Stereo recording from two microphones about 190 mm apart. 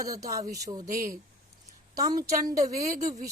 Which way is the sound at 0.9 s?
45° right (ahead or behind).